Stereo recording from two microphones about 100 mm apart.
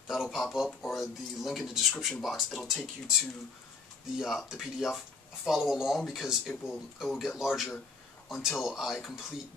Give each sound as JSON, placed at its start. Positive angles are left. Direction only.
{"t": 0.1, "sound": "speech", "side_deg": -5}
{"t": 4.2, "sound": "speech", "side_deg": -5}